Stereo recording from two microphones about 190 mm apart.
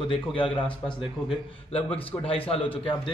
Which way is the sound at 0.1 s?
25° left (ahead or behind).